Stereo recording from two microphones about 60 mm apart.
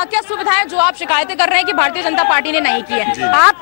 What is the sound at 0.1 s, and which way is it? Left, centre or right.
A man's voice, centre.